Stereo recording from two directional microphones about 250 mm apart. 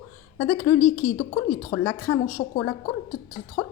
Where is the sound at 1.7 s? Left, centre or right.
Centre.